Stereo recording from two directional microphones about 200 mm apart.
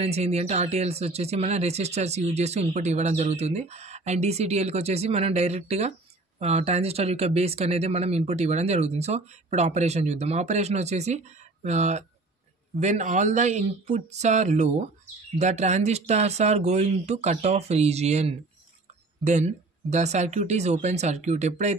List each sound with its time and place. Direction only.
0.0 s speech: 35° right (ahead or behind)